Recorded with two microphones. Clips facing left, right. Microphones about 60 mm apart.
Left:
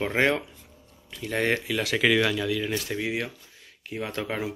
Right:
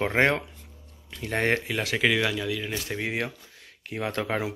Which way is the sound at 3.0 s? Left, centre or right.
Right.